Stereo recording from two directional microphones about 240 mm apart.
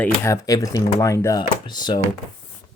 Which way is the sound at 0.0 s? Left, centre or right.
Centre.